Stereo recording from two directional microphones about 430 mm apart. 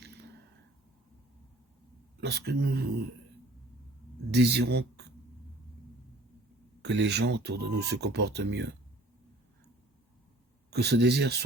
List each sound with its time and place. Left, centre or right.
0.0 s a sound: right
2.2 s speech: right
4.4 s speech: right
6.8 s speech: right
10.7 s speech: right